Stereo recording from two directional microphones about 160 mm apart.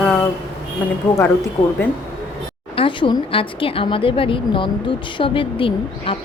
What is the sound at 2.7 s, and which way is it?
Speech, 30° left (ahead or behind).